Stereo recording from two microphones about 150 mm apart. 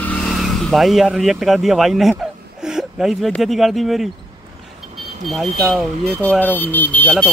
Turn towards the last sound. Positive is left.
turn(degrees=10)  # may be behind; listen again after turning